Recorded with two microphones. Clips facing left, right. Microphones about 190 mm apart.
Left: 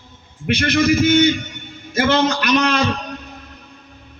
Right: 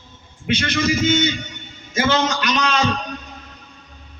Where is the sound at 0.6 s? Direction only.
60° left (ahead or behind).